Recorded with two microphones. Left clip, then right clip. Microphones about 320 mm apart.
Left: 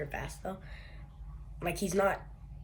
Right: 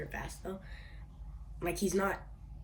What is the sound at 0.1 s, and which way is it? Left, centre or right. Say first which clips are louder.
Speech: left 3 dB; centre.